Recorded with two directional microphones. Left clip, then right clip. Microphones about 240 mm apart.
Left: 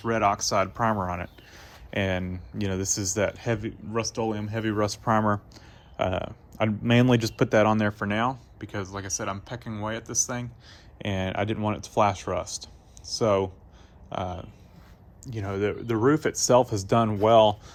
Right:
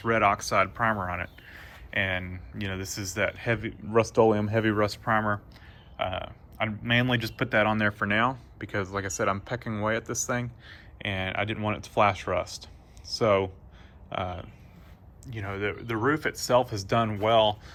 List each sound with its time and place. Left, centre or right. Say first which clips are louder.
0.0 s speech: even; centre